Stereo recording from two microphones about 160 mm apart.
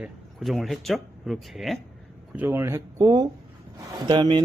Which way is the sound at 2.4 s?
15° right (ahead or behind).